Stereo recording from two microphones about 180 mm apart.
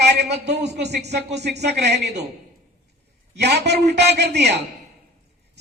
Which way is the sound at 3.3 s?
70° right (ahead or behind).